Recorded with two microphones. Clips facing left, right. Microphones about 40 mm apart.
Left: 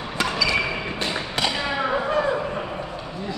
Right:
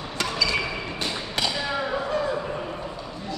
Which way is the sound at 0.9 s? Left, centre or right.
Left.